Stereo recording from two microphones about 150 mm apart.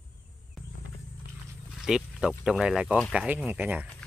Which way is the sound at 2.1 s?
5° right (ahead or behind).